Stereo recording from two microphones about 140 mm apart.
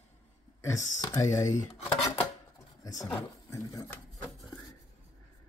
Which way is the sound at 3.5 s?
20° left (ahead or behind).